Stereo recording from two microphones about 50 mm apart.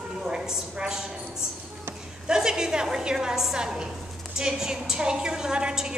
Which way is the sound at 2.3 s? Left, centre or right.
Centre.